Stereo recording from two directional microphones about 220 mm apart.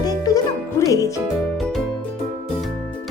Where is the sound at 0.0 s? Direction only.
15° left (ahead or behind).